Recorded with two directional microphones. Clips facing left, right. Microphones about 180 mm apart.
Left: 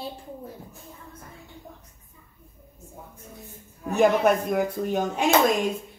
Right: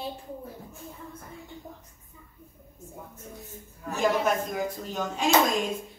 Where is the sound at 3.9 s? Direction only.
60° left (ahead or behind).